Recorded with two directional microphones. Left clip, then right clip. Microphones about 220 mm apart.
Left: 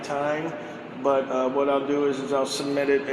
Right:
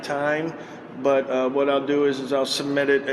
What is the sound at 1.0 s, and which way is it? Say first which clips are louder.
A man's voice: right 2 dB; 35° right (ahead or behind).